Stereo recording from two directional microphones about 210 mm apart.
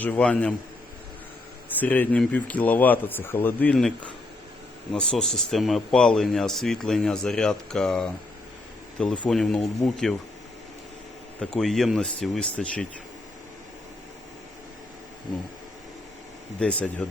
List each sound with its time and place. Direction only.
0.0 s speech: 5° left (ahead or behind)
1.8 s speech: 10° left (ahead or behind)
9.2 s speech: 5° left (ahead or behind)
11.3 s speech: centre (ahead or behind)
16.6 s speech: 5° left (ahead or behind)